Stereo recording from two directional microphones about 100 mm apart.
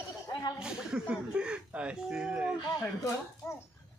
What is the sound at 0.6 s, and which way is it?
Speech, 10° right (ahead or behind).